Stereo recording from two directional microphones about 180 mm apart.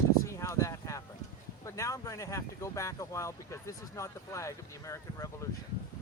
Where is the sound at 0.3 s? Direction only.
15° left (ahead or behind).